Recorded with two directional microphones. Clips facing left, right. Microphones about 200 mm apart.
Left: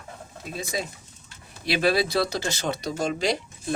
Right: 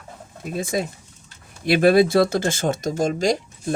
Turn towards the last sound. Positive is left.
turn(degrees=-45)  # may be behind; listen again after turning